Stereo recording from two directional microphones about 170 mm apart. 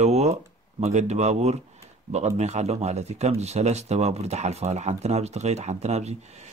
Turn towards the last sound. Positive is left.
turn(degrees=-40)  # may be behind; listen again after turning